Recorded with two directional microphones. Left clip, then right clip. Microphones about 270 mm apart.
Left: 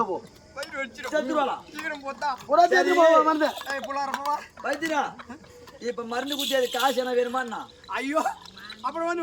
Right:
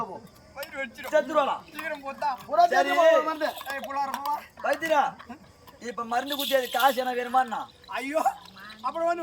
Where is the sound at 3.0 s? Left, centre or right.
Centre.